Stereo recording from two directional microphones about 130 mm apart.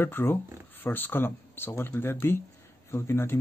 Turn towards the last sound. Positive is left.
turn(degrees=20)  # may be behind; listen again after turning